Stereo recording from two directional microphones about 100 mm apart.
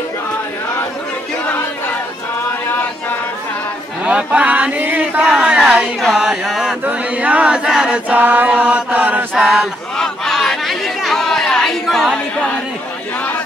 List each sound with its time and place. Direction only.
4.0 s chant: 10° right (ahead or behind)
5.2 s a sound: 10° right (ahead or behind)
6.8 s choir: 15° right (ahead or behind)
9.4 s choir: 5° right (ahead or behind)
9.9 s chatter: 5° left (ahead or behind)